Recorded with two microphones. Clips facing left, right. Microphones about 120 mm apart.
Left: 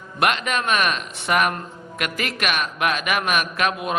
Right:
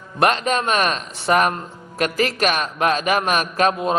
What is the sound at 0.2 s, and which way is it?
A man's voice, 35° right (ahead or behind).